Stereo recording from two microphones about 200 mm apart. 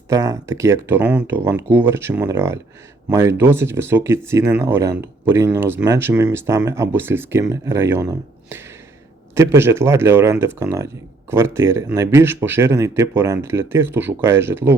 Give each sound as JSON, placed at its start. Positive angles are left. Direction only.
{"t": 0.1, "sound": "speech", "side_deg": -15}